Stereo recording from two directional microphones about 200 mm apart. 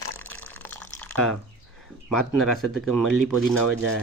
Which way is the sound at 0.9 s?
5° left (ahead or behind).